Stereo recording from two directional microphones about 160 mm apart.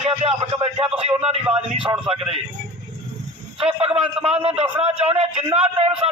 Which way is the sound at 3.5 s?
35° right (ahead or behind).